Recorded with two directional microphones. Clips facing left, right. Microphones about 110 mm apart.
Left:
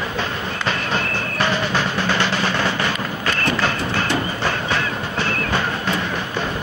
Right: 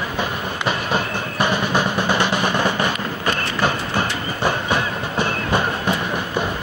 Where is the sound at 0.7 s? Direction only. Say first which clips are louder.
Right 2 dB; 15° right (ahead or behind).